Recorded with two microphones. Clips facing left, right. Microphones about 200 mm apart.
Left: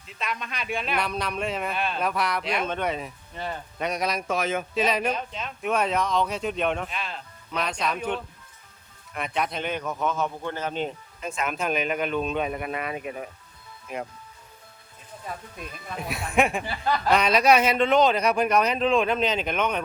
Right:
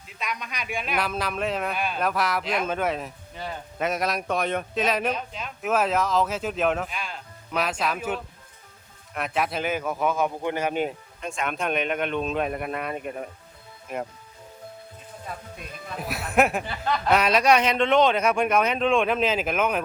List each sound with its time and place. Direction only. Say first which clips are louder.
0.3 s a man's voice: left 1 dB; centre (ahead or behind)
11.2 s a man's voice: even; centre (ahead or behind)
16.0 s a man's voice: right 1 dB; centre (ahead or behind)